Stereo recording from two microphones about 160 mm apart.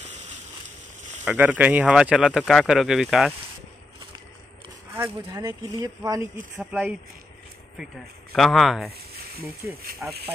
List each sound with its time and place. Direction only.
1.2 s speech: 10° right (ahead or behind)
4.9 s speech: 20° right (ahead or behind)
6.6 s speech: 5° right (ahead or behind)
10.0 s speech: 15° right (ahead or behind)